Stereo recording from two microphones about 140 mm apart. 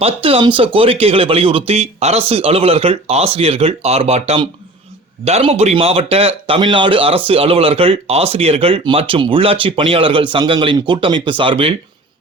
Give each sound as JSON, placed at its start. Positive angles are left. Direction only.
{"t": 0.0, "sound": "speech", "side_deg": -40}